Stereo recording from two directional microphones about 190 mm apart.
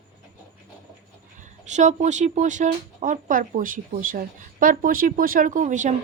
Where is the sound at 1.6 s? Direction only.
40° right (ahead or behind).